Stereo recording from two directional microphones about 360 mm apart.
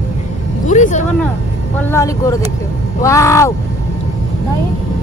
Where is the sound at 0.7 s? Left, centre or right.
Centre.